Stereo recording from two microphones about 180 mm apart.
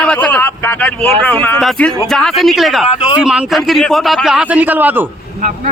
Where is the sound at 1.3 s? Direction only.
10° left (ahead or behind); by 5.0 s 10° right (ahead or behind).